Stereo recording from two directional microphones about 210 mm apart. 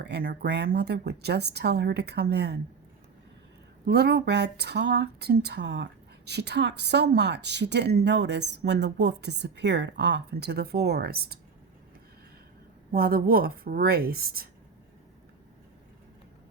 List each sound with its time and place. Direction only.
0.0 s speech: 50° right (ahead or behind)
3.8 s speech: 50° right (ahead or behind)
12.9 s speech: 45° right (ahead or behind)